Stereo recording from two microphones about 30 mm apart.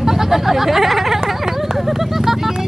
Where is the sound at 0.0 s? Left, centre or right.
Centre.